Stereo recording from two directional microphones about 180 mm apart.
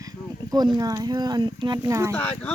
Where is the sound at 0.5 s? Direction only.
25° right (ahead or behind).